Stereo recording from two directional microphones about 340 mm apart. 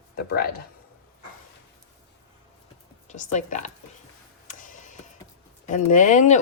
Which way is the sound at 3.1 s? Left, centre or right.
Left.